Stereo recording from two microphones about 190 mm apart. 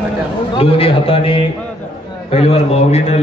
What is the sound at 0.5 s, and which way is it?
A man's voice, 30° left (ahead or behind).